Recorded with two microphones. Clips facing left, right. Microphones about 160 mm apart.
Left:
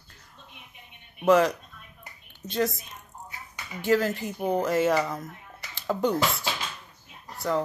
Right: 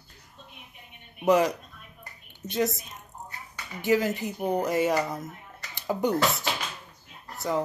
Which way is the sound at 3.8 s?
15° right (ahead or behind).